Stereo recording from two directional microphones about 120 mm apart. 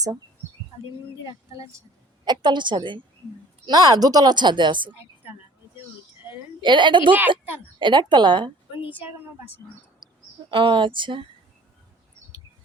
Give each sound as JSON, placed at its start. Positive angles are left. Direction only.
{"t": 2.2, "sound": "speech", "side_deg": -40}
{"t": 6.6, "sound": "speech", "side_deg": -40}
{"t": 7.1, "sound": "a woman's voice", "side_deg": -15}
{"t": 7.8, "sound": "speech", "side_deg": -40}
{"t": 10.0, "sound": "a sound", "side_deg": -40}
{"t": 10.5, "sound": "speech", "side_deg": -45}